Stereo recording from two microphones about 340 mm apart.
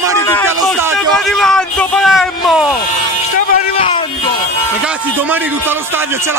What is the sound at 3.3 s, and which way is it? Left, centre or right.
Speech, centre.